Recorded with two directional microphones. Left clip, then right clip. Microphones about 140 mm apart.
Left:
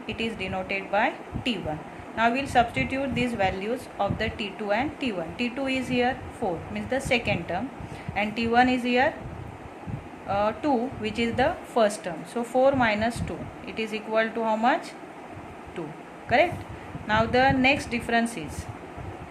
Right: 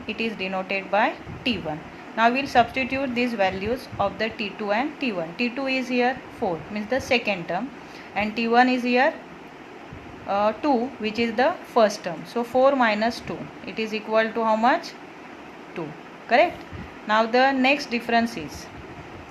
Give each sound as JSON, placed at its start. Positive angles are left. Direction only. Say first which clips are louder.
{"t": 0.1, "sound": "a woman's voice", "louder": "right 3 dB", "side_deg": -20}
{"t": 10.2, "sound": "a woman's voice", "louder": "right 3 dB", "side_deg": -15}
{"t": 17.1, "sound": "a woman's voice", "louder": "right 2 dB", "side_deg": -15}